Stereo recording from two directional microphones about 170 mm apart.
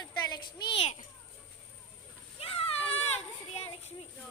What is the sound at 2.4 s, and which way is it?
Children playing, 35° left (ahead or behind).